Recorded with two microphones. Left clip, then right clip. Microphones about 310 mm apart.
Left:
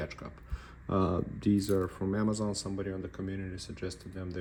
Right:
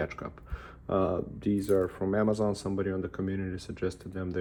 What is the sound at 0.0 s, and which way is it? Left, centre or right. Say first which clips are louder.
Speech: right 6 dB; centre.